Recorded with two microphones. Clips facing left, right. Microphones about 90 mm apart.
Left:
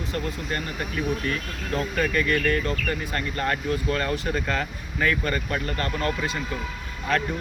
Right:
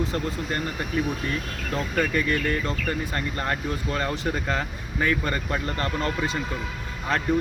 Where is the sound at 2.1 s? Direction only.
25° right (ahead or behind).